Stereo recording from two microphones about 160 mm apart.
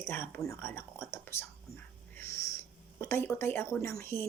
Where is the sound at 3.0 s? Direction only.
15° left (ahead or behind).